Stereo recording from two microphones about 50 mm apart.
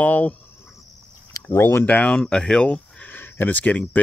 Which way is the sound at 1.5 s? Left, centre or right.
Left.